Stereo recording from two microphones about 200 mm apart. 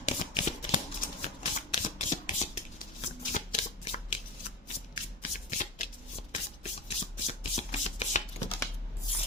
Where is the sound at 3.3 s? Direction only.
35° left (ahead or behind).